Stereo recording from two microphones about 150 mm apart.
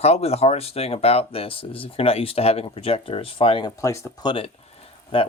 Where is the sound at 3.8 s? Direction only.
20° left (ahead or behind).